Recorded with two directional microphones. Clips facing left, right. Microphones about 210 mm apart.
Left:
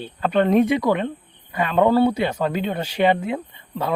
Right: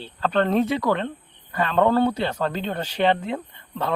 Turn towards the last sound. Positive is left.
turn(degrees=10)  # may be behind; listen again after turning